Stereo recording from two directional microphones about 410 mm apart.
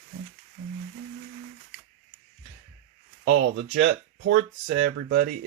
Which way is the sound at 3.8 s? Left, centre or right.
Right.